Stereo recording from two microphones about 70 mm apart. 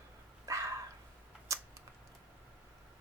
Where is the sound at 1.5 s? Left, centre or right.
Right.